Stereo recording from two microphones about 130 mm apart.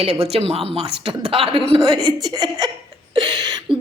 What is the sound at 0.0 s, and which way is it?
A woman's voice, 50° right (ahead or behind).